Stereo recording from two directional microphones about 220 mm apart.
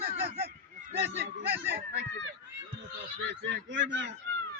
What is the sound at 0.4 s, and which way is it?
Honk, 40° right (ahead or behind).